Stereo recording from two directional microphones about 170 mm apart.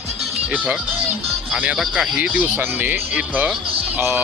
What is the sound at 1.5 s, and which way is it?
Speech, 5° right (ahead or behind).